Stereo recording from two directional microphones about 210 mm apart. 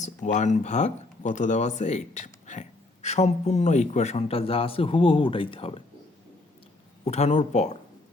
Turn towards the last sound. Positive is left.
turn(degrees=35)  # may be behind; listen again after turning